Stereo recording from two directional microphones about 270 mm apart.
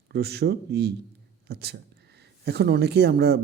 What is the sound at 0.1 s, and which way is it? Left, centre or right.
A man's voice, right.